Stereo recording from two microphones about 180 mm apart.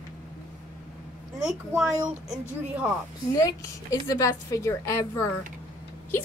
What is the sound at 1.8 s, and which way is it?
Speech, 5° right (ahead or behind).